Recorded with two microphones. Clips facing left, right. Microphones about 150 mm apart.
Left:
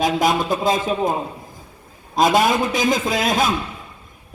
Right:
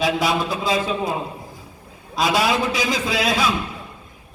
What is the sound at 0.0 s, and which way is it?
A man's voice, 45° left (ahead or behind).